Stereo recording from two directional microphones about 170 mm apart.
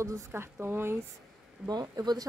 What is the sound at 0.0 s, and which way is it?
Speech, 15° right (ahead or behind).